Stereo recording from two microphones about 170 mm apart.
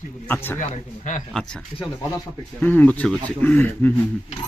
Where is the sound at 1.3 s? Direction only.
5° left (ahead or behind).